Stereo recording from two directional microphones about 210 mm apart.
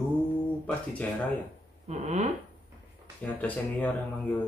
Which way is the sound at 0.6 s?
5° left (ahead or behind).